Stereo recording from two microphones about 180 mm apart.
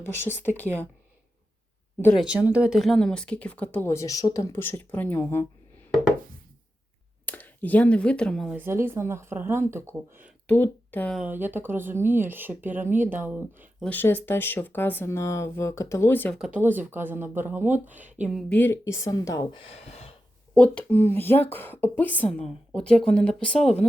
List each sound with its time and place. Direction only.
0.3 s speech: 10° left (ahead or behind)
2.2 s speech: 5° right (ahead or behind); by 5.5 s 15° left (ahead or behind)
7.3 s speech: 10° left (ahead or behind)
8.5 s speech: 15° right (ahead or behind)
10.4 s speech: 10° left (ahead or behind)
11.2 s speech: 10° right (ahead or behind)
13.8 s speech: 10° left (ahead or behind)
16.4 s speech: 10° right (ahead or behind)
18.4 s speech: 10° left (ahead or behind)
19.5 s speech: 35° left (ahead or behind)
20.5 s speech: 5° left (ahead or behind)